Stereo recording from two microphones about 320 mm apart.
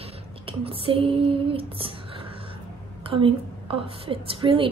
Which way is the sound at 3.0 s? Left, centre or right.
Centre.